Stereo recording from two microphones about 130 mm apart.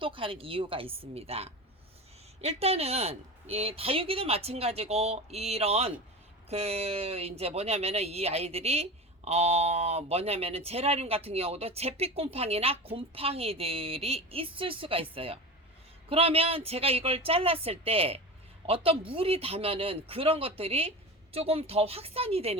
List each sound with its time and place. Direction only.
0.0 s speech: 40° right (ahead or behind)